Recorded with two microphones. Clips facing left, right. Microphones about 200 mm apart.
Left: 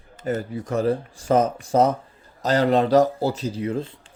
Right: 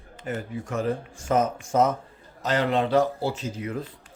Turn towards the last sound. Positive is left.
turn(degrees=30)  # may be behind; listen again after turning